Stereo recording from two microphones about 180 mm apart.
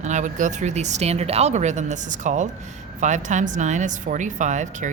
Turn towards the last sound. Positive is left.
turn(degrees=-40)  # may be behind; listen again after turning